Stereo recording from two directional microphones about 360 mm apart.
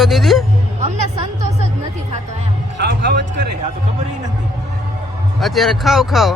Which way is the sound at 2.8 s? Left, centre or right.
Right.